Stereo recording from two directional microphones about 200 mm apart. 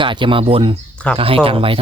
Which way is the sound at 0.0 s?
25° right (ahead or behind).